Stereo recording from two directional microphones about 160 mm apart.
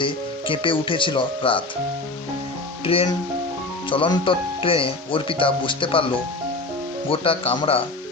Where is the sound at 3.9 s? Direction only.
35° left (ahead or behind).